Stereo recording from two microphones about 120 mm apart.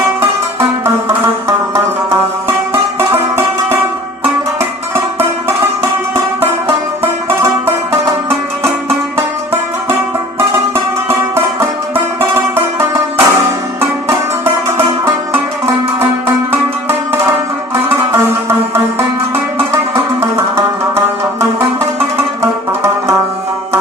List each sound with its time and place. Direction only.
2.5 s music: 20° right (ahead or behind)
11.9 s music: 20° right (ahead or behind)
14.8 s music: 20° right (ahead or behind)
18.1 s music: 20° right (ahead or behind)